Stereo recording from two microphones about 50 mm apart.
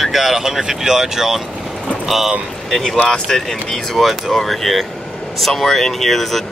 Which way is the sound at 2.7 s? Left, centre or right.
Centre.